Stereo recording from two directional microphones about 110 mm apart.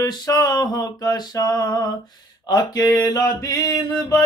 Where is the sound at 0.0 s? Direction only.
35° left (ahead or behind).